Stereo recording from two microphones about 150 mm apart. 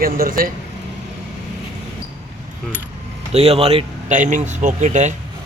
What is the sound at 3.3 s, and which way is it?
Speech, 40° right (ahead or behind).